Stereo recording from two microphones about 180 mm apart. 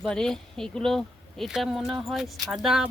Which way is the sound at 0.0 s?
5° left (ahead or behind).